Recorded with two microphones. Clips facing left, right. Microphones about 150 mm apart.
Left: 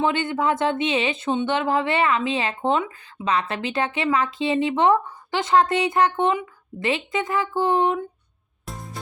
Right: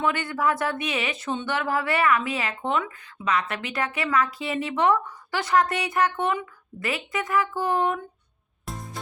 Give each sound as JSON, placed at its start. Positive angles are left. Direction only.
{"t": 0.0, "sound": "speech", "side_deg": 25}
{"t": 8.6, "sound": "music", "side_deg": 0}